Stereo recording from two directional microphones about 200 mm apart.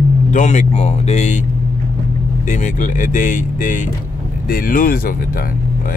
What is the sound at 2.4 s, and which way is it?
Speech, 40° left (ahead or behind).